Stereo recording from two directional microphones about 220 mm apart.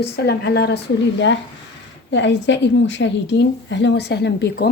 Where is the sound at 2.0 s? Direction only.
55° left (ahead or behind).